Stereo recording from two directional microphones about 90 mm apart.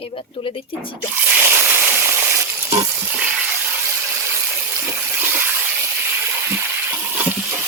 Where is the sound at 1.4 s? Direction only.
25° right (ahead or behind).